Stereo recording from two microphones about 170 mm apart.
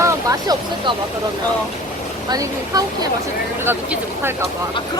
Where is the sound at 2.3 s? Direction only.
20° right (ahead or behind).